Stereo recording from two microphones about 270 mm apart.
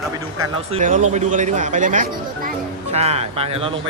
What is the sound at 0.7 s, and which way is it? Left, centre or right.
Speech, right.